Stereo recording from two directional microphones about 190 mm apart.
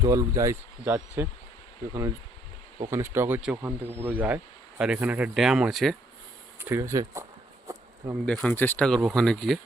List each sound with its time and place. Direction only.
0.0 s speech: 15° right (ahead or behind); by 6.0 s centre (ahead or behind)
6.6 s speech: 15° right (ahead or behind)
7.7 s bee: 15° right (ahead or behind)
8.3 s speech: 5° left (ahead or behind)